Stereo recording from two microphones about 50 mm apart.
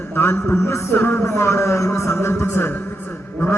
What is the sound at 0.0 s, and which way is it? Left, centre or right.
Speech, left.